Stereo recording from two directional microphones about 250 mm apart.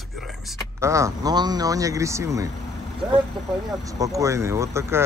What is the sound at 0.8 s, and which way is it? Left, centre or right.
Speech, centre.